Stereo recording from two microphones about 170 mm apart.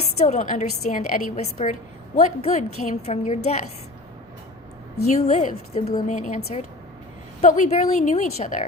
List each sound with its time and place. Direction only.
0.2 s a woman's voice: 45° left (ahead or behind)
5.0 s a woman's voice: 40° left (ahead or behind)
7.4 s a woman's voice: 45° left (ahead or behind)